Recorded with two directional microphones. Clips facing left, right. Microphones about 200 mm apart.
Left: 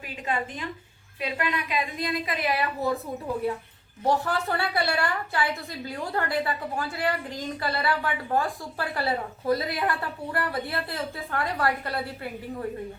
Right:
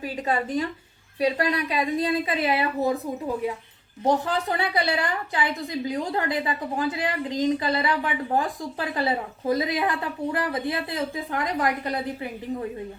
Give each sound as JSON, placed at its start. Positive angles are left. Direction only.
{"t": 0.0, "sound": "a woman's voice", "side_deg": -35}
{"t": 4.0, "sound": "a woman's voice", "side_deg": -20}